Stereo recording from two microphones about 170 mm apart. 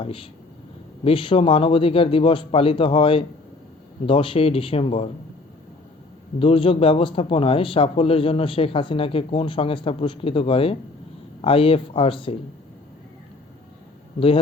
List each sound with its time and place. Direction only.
0.0 s a man's voice: 35° left (ahead or behind)
6.4 s a man's voice: 35° left (ahead or behind)